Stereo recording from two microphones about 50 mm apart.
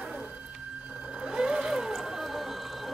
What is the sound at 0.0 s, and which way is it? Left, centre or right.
Music, right.